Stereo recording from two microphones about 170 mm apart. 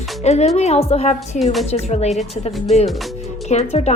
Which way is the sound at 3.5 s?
40° left (ahead or behind).